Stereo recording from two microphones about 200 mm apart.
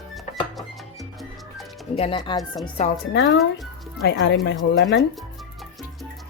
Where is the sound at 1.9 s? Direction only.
30° left (ahead or behind).